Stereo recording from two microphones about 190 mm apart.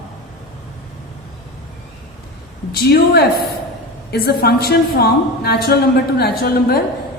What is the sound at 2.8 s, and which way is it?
A woman's voice, 55° left (ahead or behind).